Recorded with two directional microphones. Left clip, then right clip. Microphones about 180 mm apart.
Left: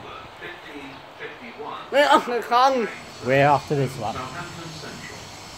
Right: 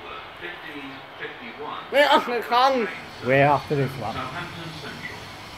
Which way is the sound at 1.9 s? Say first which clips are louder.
Left 1 dB; 35° left (ahead or behind).